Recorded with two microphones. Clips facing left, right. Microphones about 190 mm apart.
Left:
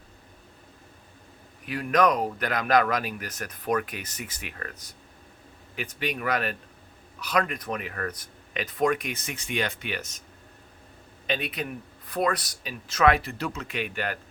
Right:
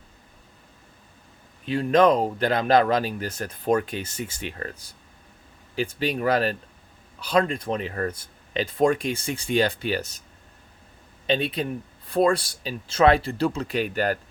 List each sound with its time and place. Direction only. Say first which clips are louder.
1.6 s speech: right 5 dB; 25° right (ahead or behind)
11.3 s speech: right 6 dB; 30° right (ahead or behind)